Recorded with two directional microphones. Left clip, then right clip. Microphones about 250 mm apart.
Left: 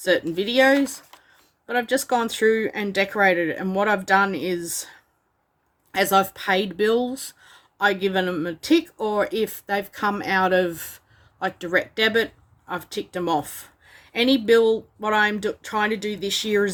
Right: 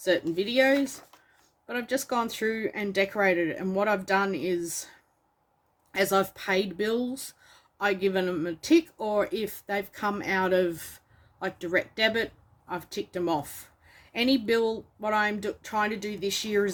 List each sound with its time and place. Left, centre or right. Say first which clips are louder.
0.0 s speech: left 5 dB; centre
5.9 s speech: left 6 dB; centre